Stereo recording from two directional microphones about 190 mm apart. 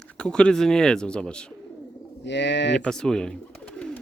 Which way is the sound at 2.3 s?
65° left (ahead or behind).